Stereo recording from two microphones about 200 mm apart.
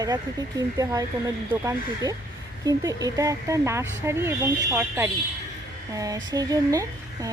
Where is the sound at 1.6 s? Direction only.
15° right (ahead or behind).